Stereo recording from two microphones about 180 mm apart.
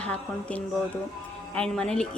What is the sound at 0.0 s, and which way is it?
A woman's voice, 5° left (ahead or behind).